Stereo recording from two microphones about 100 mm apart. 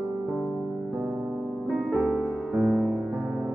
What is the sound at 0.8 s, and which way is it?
Music, 20° right (ahead or behind).